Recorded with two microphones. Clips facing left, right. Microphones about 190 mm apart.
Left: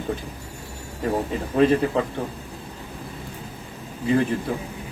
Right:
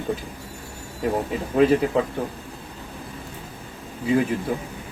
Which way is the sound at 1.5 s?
5° right (ahead or behind).